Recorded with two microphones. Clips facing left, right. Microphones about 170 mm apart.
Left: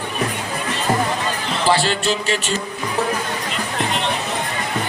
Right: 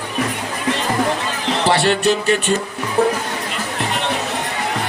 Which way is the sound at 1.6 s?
65° right (ahead or behind).